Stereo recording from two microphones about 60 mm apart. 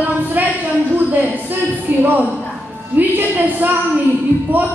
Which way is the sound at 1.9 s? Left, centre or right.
Right.